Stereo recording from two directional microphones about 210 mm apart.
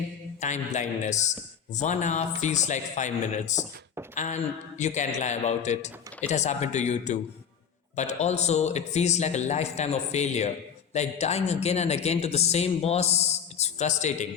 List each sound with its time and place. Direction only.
0.3 s a man's voice: 35° left (ahead or behind)